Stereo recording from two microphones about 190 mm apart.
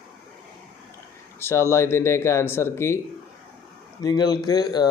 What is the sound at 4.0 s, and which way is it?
Speech, 20° left (ahead or behind).